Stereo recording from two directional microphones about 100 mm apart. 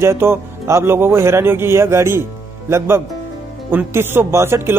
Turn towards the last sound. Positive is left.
turn(degrees=-25)  # may be behind; listen again after turning